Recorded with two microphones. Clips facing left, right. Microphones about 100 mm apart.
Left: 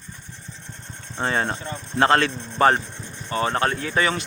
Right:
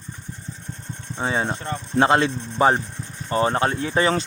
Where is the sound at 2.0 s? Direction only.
25° right (ahead or behind).